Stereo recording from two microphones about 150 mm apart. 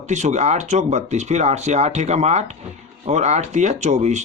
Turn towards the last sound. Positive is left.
turn(degrees=-50)  # may be behind; listen again after turning